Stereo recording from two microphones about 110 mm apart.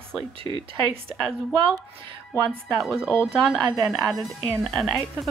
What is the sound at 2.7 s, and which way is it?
Speech, centre (ahead or behind).